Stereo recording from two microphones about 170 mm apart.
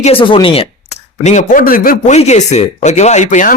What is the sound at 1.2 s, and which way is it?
Speech, 45° left (ahead or behind).